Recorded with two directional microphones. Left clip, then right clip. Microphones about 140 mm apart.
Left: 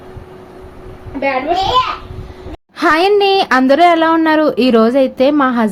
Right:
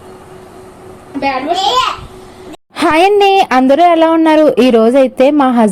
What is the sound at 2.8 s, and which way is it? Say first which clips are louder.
A woman's voice: right 2 dB; 40° right (ahead or behind).